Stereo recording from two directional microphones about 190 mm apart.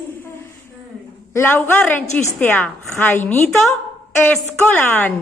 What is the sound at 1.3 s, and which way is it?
A woman's voice, 10° left (ahead or behind).